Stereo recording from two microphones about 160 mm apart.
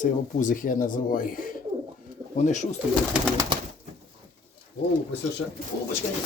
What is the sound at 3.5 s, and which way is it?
Bird, 30° right (ahead or behind).